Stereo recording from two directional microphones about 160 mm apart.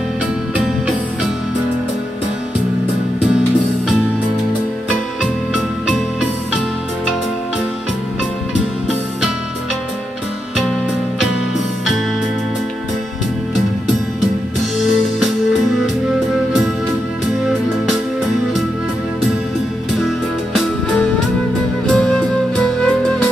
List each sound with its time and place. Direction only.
21.8 s music: 5° left (ahead or behind)